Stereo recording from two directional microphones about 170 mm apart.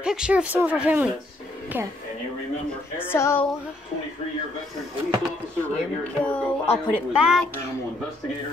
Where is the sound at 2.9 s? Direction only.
15° left (ahead or behind).